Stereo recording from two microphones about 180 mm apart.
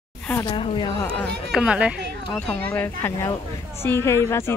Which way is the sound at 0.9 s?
10° left (ahead or behind).